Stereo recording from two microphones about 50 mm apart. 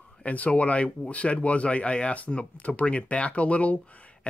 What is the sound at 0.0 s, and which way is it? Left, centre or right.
Speech, left.